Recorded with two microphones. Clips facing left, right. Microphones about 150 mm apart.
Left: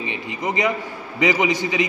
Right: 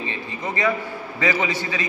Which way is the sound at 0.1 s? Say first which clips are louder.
Left 3 dB; 15° left (ahead or behind).